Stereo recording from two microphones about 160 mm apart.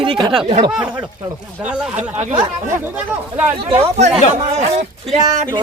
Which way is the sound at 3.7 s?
45° right (ahead or behind).